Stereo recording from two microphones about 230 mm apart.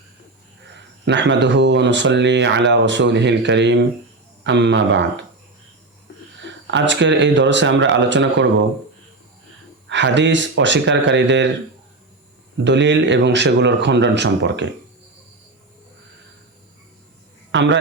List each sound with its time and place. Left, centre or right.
0.7 s speech: right
6.3 s speech: right
9.9 s speech: right
12.5 s speech: right
17.5 s a man's voice: right